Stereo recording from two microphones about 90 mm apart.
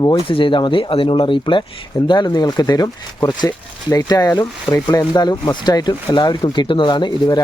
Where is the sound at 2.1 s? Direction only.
50° left (ahead or behind).